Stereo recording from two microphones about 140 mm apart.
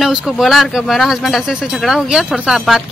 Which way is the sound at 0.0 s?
Centre (ahead or behind).